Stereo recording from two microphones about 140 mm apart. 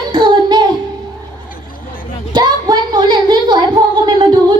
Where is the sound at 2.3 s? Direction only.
30° right (ahead or behind).